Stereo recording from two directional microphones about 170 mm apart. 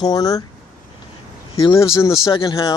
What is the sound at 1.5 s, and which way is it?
Speech, 25° left (ahead or behind).